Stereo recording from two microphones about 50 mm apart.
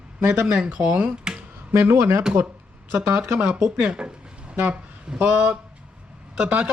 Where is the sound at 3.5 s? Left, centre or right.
Centre.